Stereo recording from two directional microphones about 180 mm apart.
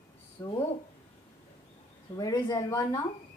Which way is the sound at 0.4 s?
25° left (ahead or behind).